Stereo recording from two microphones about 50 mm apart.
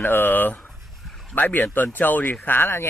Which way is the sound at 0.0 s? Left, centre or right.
Left.